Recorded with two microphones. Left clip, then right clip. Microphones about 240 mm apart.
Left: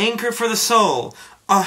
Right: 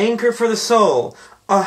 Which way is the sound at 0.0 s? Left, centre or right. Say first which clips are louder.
Right 3 dB; left.